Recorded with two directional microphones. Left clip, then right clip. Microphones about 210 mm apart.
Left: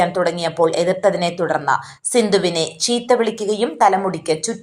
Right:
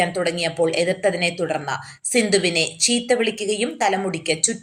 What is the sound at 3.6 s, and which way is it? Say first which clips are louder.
Speech: left 8 dB; 5° left (ahead or behind).